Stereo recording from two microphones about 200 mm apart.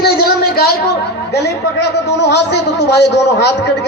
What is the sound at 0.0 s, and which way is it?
A woman's voice, 50° left (ahead or behind).